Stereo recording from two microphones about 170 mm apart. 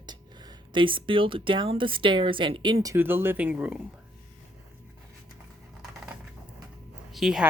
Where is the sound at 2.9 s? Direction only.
15° right (ahead or behind).